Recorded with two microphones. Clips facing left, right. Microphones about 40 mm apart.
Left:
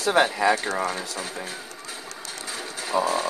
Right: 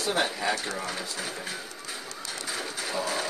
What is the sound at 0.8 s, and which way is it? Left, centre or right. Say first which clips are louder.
Speech: left 4 dB; centre.